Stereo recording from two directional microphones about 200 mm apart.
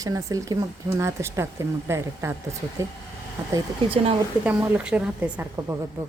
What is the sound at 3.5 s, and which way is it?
Speech, 25° right (ahead or behind).